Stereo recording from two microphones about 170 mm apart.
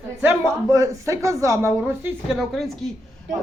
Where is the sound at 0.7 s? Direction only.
20° right (ahead or behind).